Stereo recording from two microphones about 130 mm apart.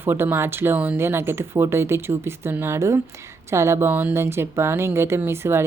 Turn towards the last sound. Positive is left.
turn(degrees=-20)  # may be behind; listen again after turning